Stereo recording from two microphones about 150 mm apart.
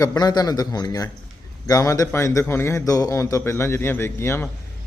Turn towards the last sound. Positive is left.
turn(degrees=15)  # may be behind; listen again after turning